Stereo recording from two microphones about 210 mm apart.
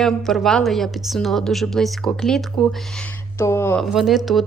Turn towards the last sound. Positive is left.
turn(degrees=0)  # may be behind; listen again after turning